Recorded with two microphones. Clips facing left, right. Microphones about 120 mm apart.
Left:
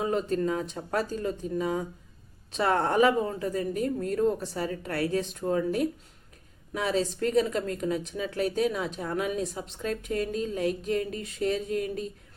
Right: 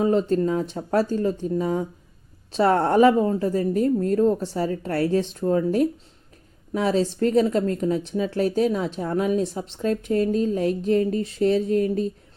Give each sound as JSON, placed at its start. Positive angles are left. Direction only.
{"t": 0.0, "sound": "speech", "side_deg": -35}